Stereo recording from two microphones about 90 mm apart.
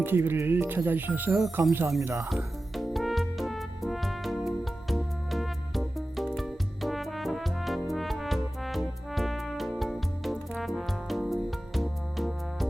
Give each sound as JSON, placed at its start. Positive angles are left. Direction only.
{"t": 0.0, "sound": "speech", "side_deg": -25}
{"t": 2.3, "sound": "music", "side_deg": 0}